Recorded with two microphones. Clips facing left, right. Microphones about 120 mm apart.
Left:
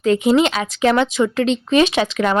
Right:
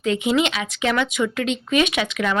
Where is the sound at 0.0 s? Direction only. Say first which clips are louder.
Left 5 dB; 40° left (ahead or behind).